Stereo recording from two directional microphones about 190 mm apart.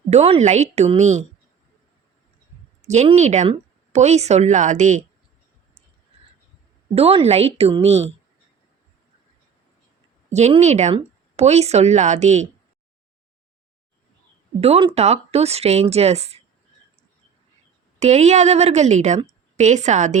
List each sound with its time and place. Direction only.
0.1 s a woman's voice: 35° right (ahead or behind)
2.8 s a woman's voice: 35° right (ahead or behind)
6.9 s a woman's voice: 30° right (ahead or behind)
10.3 s a woman's voice: 35° right (ahead or behind)
14.6 s a woman's voice: 30° right (ahead or behind)
18.0 s a woman's voice: 35° right (ahead or behind)